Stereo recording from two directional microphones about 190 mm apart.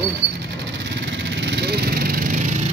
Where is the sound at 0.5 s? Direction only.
70° right (ahead or behind); by 2.6 s 40° right (ahead or behind).